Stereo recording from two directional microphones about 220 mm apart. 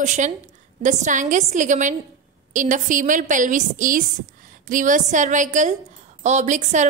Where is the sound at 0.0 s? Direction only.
35° right (ahead or behind).